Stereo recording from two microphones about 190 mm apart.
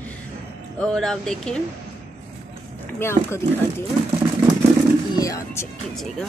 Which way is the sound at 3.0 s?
15° left (ahead or behind).